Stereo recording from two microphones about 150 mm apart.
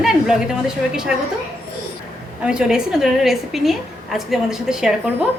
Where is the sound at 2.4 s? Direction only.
5° right (ahead or behind).